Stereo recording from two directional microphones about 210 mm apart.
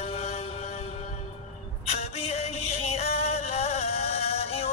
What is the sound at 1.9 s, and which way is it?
Music, 30° left (ahead or behind).